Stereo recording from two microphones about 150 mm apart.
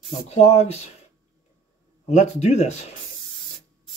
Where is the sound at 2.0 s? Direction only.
50° left (ahead or behind).